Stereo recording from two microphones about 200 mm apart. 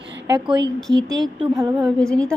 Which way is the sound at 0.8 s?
Centre (ahead or behind).